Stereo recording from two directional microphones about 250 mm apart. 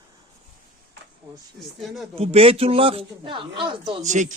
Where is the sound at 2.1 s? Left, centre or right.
Right.